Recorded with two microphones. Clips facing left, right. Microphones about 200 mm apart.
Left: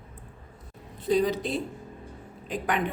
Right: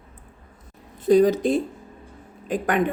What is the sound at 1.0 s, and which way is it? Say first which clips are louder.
Speech: right 8 dB; 45° right (ahead or behind).